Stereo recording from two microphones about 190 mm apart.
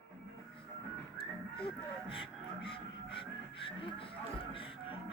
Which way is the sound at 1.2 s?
30° left (ahead or behind).